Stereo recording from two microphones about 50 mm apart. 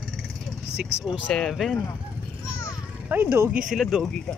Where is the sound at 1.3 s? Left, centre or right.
Centre.